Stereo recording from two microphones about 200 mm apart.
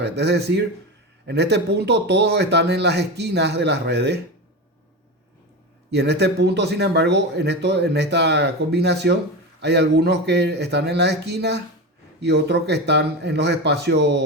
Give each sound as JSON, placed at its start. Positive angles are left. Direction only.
{"t": 0.0, "sound": "a man's voice", "side_deg": -55}
{"t": 5.9, "sound": "a man's voice", "side_deg": -55}